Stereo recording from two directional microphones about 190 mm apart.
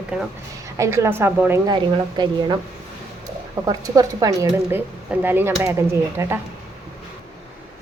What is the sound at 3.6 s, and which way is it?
Speech, 20° right (ahead or behind).